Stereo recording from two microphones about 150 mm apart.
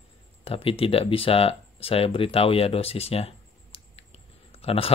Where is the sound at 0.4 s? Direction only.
35° left (ahead or behind).